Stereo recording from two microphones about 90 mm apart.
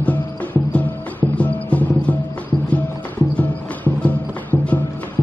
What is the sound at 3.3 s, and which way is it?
Music, 15° left (ahead or behind).